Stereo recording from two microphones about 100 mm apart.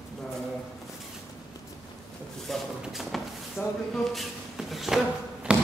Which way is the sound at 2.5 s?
Centre (ahead or behind).